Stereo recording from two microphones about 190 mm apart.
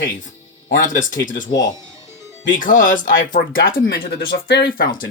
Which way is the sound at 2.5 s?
45° left (ahead or behind).